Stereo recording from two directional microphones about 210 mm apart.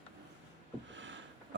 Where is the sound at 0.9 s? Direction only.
60° right (ahead or behind).